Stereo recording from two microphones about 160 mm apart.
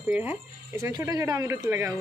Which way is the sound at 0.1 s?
10° right (ahead or behind).